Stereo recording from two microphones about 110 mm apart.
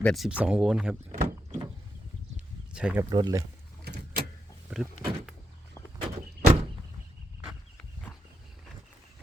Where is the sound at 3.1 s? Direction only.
35° right (ahead or behind).